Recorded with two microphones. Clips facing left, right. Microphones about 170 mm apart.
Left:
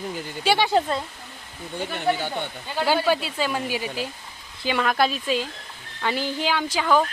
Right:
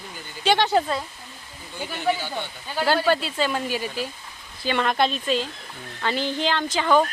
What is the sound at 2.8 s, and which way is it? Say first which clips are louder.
Speech: right 1 dB; 10° left (ahead or behind).